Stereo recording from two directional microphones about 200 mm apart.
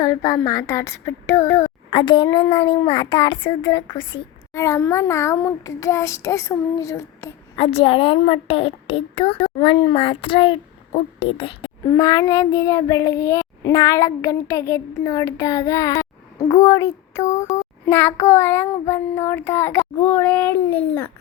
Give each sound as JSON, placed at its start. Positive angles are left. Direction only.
{"t": 0.0, "sound": "child singing", "side_deg": 15}
{"t": 1.9, "sound": "a woman's voice", "side_deg": 25}
{"t": 4.5, "sound": "child singing", "side_deg": 15}
{"t": 7.6, "sound": "a woman's voice", "side_deg": 30}
{"t": 17.2, "sound": "speech", "side_deg": 35}
{"t": 17.6, "sound": "child singing", "side_deg": 10}